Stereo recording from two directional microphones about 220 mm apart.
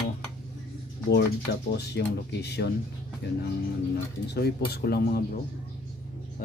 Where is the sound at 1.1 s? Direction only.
45° left (ahead or behind).